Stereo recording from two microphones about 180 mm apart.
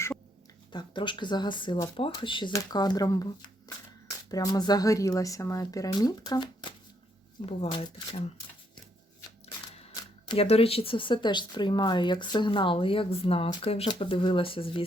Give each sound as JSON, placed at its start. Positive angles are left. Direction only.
{"t": 0.7, "sound": "speech", "side_deg": 25}
{"t": 9.9, "sound": "speech", "side_deg": 30}